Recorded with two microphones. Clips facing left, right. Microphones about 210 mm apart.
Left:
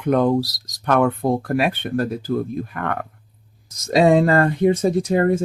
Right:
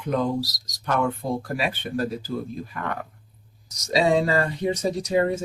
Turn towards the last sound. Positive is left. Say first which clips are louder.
# left 5 dB
turn(degrees=55)  # may be behind; listen again after turning